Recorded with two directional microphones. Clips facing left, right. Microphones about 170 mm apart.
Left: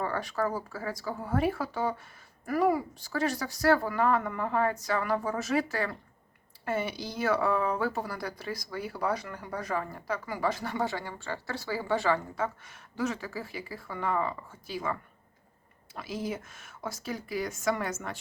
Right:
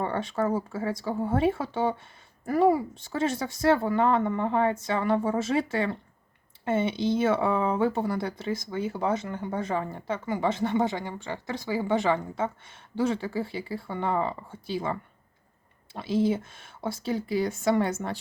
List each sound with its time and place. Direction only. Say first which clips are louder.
0.0 s speech: right 3 dB; 25° right (ahead or behind)
16.0 s speech: right 9 dB; 30° right (ahead or behind)